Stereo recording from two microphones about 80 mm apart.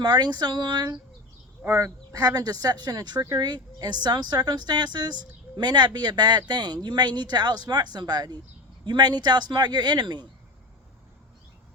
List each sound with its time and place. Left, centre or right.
0.0 s a woman's voice: right
1.7 s a woman's voice: right
3.2 s speech: right
3.5 s a woman's voice: right